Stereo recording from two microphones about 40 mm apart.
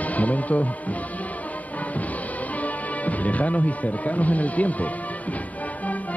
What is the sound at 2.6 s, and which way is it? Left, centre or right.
Speech, left.